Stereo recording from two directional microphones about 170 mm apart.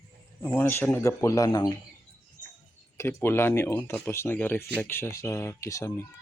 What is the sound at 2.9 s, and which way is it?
Speech, 15° left (ahead or behind).